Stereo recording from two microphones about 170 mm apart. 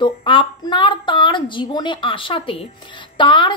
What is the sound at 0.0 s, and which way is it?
A woman's voice, 30° left (ahead or behind).